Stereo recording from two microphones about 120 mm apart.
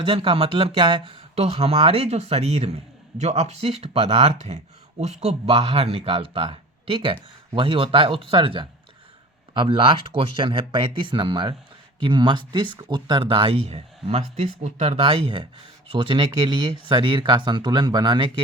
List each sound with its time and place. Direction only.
0.0 s speech: 45° right (ahead or behind)
13.7 s speech: 65° right (ahead or behind); by 18.3 s 35° right (ahead or behind)